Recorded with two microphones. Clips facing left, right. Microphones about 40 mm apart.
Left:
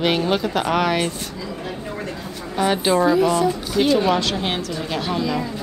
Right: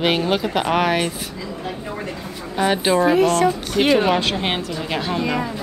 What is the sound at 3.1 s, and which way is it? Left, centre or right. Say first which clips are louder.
Speech: right 1 dB; right.